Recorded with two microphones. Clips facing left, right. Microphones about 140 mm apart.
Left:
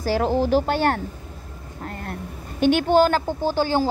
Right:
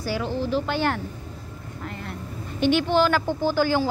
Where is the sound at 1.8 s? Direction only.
45° left (ahead or behind).